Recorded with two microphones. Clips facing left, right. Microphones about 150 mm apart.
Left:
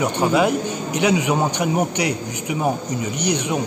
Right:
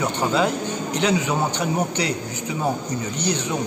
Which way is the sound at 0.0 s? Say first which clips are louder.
Left 3 dB; 15° left (ahead or behind).